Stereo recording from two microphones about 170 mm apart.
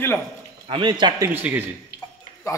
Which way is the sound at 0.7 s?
25° right (ahead or behind).